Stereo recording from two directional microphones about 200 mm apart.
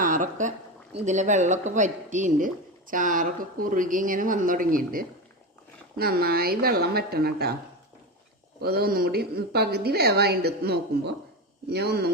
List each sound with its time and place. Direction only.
0.0 s a sound: 40° right (ahead or behind)
0.9 s a woman's voice: 35° right (ahead or behind)
8.6 s a woman's voice: 50° right (ahead or behind)